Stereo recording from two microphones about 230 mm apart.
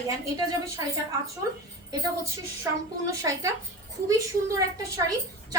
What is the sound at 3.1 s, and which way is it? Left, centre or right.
Speech, centre.